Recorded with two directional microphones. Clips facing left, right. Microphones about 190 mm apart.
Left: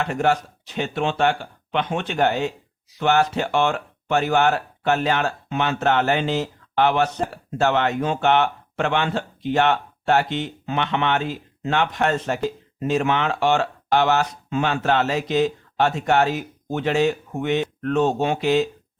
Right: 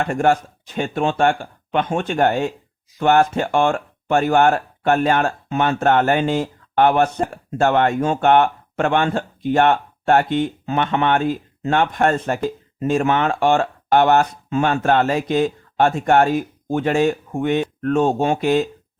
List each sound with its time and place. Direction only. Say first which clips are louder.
0.0 s speech: right 3 dB; 50° right (ahead or behind)